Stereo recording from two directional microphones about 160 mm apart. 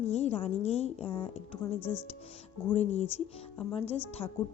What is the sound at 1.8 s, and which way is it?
Speech, 15° left (ahead or behind).